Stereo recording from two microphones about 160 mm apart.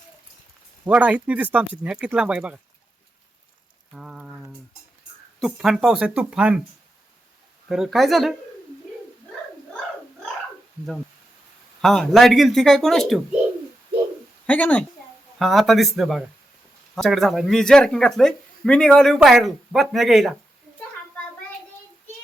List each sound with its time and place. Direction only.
0.9 s speech: 10° right (ahead or behind)
3.9 s a sound: 5° right (ahead or behind)
5.4 s speech: centre (ahead or behind)
7.7 s speech: centre (ahead or behind)
11.8 s speech: centre (ahead or behind)
14.4 s speech: 10° left (ahead or behind)